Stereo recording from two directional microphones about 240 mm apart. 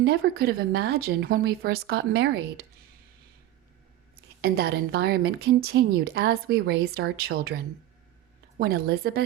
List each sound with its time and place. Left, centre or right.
0.0 s a woman's voice: right
4.4 s a woman's voice: right